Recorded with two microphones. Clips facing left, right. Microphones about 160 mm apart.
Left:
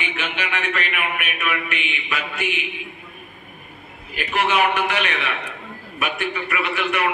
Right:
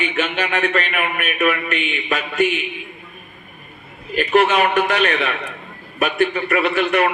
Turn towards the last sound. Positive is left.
turn(degrees=-45)  # may be behind; listen again after turning